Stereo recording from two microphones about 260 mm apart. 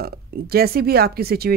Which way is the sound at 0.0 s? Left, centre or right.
Right.